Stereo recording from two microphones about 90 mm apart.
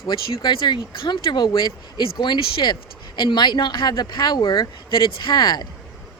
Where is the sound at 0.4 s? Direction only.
55° left (ahead or behind).